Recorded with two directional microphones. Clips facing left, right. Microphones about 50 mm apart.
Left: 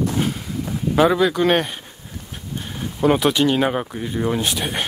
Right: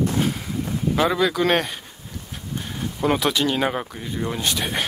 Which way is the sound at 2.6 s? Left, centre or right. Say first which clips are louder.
Left 5 dB; centre.